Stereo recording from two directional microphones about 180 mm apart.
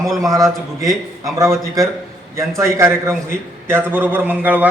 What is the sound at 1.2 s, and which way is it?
Speech, 15° right (ahead or behind).